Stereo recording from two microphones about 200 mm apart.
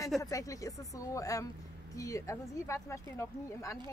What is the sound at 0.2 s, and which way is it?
Speech, 15° left (ahead or behind).